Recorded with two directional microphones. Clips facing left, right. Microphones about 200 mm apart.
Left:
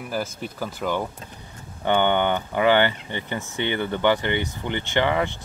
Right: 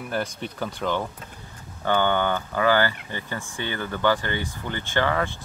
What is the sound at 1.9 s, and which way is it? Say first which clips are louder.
Speech: left 2 dB; 20° left (ahead or behind).